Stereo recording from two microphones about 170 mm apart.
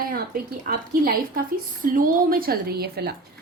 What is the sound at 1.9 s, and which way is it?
A woman's voice, 55° right (ahead or behind).